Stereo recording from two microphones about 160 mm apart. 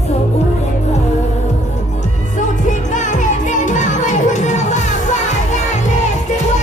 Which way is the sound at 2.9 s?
50° left (ahead or behind).